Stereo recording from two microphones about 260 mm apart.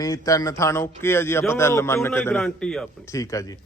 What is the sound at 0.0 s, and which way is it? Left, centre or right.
Speech, centre.